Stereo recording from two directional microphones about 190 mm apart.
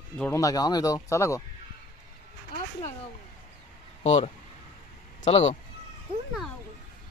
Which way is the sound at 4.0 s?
35° left (ahead or behind).